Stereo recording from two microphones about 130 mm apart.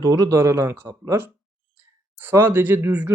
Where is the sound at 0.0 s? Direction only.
30° right (ahead or behind).